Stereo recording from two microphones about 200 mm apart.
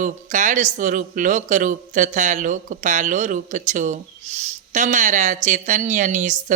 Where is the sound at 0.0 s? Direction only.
40° right (ahead or behind).